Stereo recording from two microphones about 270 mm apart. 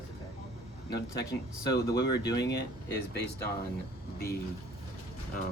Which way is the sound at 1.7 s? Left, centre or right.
Left.